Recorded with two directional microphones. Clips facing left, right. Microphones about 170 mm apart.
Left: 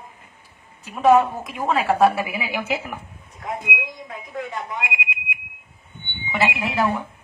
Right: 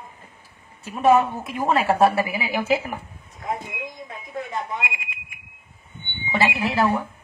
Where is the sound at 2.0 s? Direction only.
30° right (ahead or behind).